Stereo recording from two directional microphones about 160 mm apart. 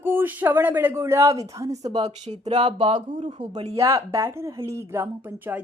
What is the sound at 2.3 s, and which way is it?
Speech, 45° right (ahead or behind).